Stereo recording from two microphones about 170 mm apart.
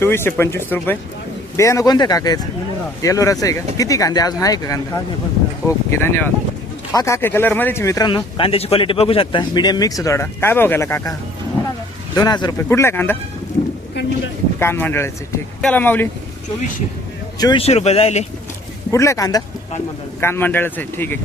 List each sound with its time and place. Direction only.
0.0 s speech: 15° left (ahead or behind)
12.1 s speech: 25° left (ahead or behind)
14.6 s speech: 15° left (ahead or behind)
17.4 s speech: 25° left (ahead or behind)
17.7 s speech: 40° left (ahead or behind)
18.9 s speech: 20° left (ahead or behind)